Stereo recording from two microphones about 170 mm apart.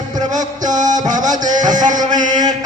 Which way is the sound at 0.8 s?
45° right (ahead or behind).